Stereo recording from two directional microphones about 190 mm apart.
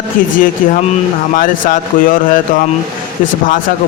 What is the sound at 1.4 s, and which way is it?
A man's voice, 45° left (ahead or behind).